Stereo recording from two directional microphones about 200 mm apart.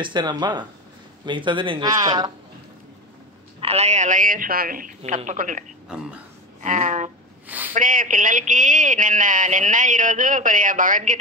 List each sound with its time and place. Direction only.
0.0 s speech: 20° right (ahead or behind)
3.6 s speech: 35° right (ahead or behind)
5.9 s speech: 5° right (ahead or behind)
6.6 s speech: 40° right (ahead or behind)
7.4 s a sound: 10° right (ahead or behind)
7.7 s speech: 40° right (ahead or behind)